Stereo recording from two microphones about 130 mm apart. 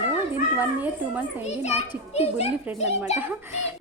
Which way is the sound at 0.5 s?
10° right (ahead or behind).